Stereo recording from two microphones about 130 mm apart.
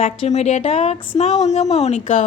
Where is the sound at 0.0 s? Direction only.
60° left (ahead or behind).